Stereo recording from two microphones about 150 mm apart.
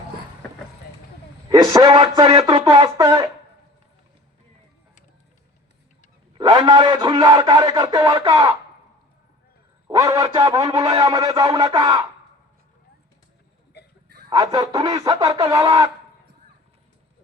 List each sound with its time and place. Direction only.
1.5 s a man's voice: 25° right (ahead or behind)
6.3 s a man's voice: 25° right (ahead or behind)
9.8 s a man's voice: 20° right (ahead or behind)
14.3 s a man's voice: 25° right (ahead or behind)